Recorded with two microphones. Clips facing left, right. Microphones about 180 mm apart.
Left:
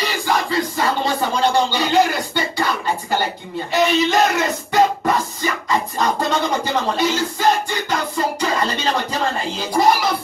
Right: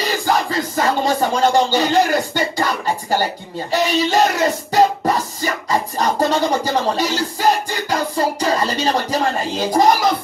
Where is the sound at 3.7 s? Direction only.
35° right (ahead or behind).